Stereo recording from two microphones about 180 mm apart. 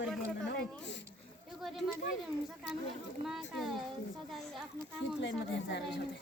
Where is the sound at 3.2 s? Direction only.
Centre (ahead or behind).